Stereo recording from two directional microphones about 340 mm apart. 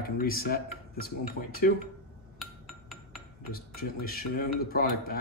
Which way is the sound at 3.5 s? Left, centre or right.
Left.